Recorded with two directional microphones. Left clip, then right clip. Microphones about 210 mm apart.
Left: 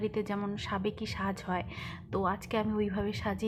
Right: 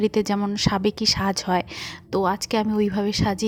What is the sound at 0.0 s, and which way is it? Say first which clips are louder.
A woman's voice: right 11 dB; 40° right (ahead or behind).